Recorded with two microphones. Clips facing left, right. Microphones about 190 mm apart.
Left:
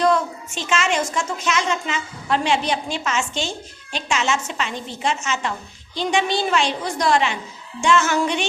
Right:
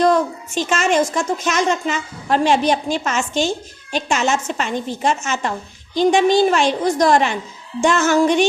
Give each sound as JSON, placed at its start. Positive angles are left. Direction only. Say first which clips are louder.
{"t": 0.0, "sound": "a woman's voice", "louder": "right 3 dB", "side_deg": -40}